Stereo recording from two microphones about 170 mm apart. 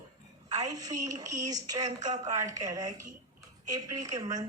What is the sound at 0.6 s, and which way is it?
A woman's voice, 20° right (ahead or behind).